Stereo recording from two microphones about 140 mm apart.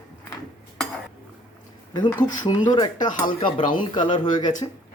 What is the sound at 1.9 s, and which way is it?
Speech, 30° left (ahead or behind).